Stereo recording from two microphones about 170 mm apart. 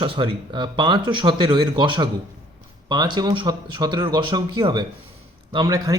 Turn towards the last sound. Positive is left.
turn(degrees=-20)  # may be behind; listen again after turning